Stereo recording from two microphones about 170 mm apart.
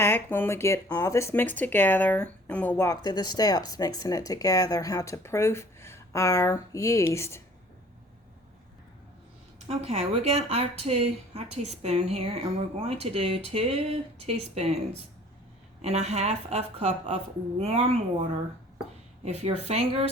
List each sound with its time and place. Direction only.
0.0 s speech: 15° left (ahead or behind)
9.6 s speech: 35° right (ahead or behind)
15.8 s speech: 40° right (ahead or behind)
19.2 s speech: 40° right (ahead or behind)